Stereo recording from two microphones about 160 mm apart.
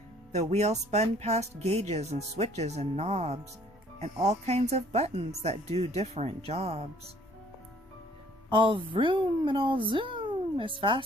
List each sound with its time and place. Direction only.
0.3 s speech: 45° right (ahead or behind)
8.4 s speech: 30° right (ahead or behind)